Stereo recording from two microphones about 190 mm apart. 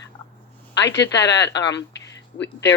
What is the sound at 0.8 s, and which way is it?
Speech, 70° left (ahead or behind).